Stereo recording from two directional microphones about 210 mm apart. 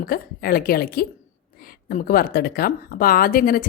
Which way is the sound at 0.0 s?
45° left (ahead or behind).